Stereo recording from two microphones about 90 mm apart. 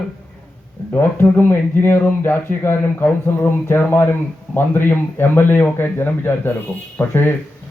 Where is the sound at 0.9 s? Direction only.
25° left (ahead or behind).